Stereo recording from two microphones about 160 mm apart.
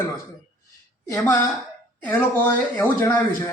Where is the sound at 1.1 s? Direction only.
15° left (ahead or behind).